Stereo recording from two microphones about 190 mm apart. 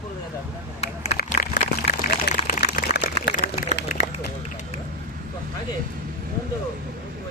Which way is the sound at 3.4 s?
35° left (ahead or behind).